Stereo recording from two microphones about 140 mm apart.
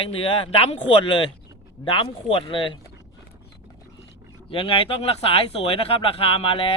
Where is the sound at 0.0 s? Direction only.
40° left (ahead or behind).